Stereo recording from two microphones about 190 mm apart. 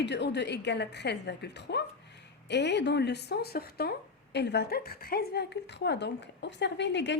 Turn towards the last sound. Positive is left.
turn(degrees=65)  # may be behind; listen again after turning